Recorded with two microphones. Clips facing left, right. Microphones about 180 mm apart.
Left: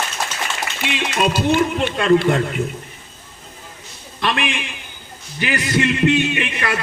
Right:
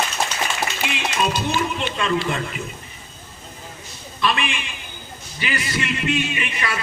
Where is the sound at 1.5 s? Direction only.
55° left (ahead or behind).